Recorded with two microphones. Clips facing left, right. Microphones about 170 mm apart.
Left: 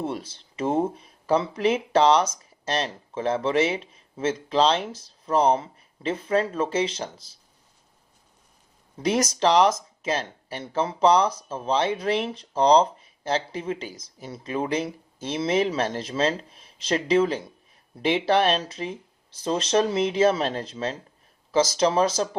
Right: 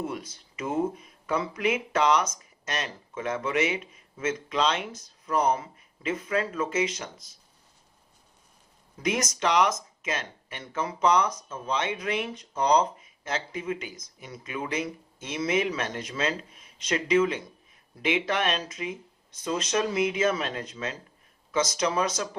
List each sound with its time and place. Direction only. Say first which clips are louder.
0.0 s speech: left 3 dB; 30° left (ahead or behind)
9.0 s speech: left 5 dB; 35° left (ahead or behind)